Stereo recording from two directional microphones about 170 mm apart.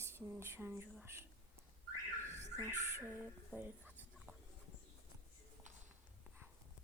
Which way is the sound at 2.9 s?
10° right (ahead or behind).